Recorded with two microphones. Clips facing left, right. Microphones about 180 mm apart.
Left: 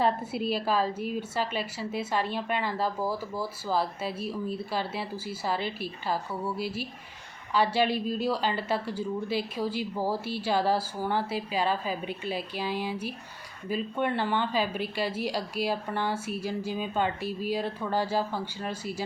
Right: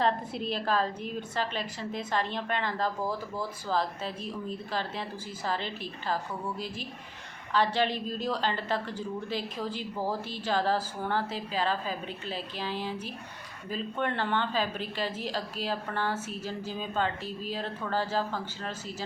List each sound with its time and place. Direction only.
0.0 s a woman's voice: 10° left (ahead or behind)